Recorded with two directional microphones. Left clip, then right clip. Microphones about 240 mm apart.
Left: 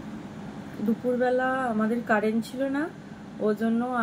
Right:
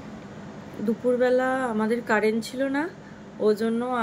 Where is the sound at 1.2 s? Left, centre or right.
Right.